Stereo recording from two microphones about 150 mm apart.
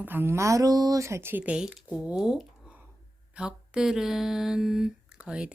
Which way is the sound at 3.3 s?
5° right (ahead or behind).